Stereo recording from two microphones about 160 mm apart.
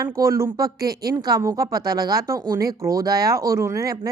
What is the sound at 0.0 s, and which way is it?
A woman's voice, 20° right (ahead or behind).